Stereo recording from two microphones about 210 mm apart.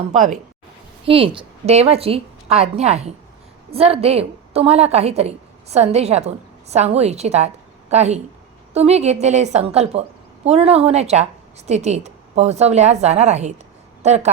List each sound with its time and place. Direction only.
0.1 s a woman's voice: 35° right (ahead or behind)
1.0 s a woman's voice: 25° right (ahead or behind)